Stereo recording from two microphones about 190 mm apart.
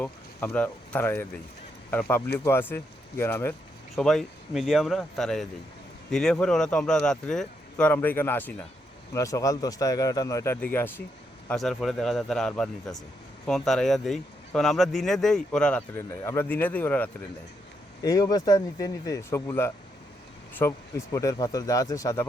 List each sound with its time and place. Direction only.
0.0 s speech: 10° left (ahead or behind)
3.9 s speech: centre (ahead or behind)
18.0 s speech: 20° left (ahead or behind)